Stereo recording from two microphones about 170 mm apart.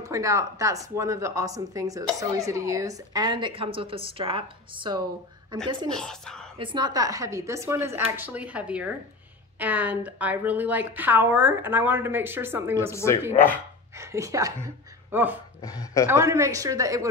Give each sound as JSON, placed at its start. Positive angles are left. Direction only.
{"t": 0.0, "sound": "speech", "side_deg": -20}
{"t": 5.9, "sound": "speech", "side_deg": 5}
{"t": 6.6, "sound": "a woman's voice", "side_deg": -25}
{"t": 12.9, "sound": "speech", "side_deg": 15}
{"t": 13.9, "sound": "a woman's voice", "side_deg": -15}
{"t": 15.6, "sound": "speech", "side_deg": 20}
{"t": 16.1, "sound": "speech", "side_deg": -15}